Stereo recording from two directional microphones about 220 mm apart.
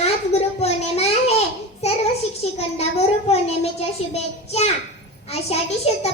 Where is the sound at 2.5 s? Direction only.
30° left (ahead or behind).